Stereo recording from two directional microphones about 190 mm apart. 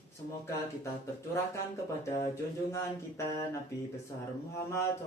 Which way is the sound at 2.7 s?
15° left (ahead or behind).